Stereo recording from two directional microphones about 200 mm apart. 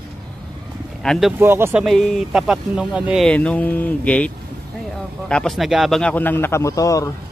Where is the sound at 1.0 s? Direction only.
Centre (ahead or behind).